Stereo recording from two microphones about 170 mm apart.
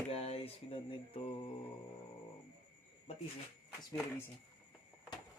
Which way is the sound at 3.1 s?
35° left (ahead or behind).